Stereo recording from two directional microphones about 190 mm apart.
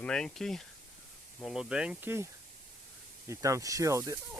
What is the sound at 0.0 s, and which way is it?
Speech, 5° left (ahead or behind).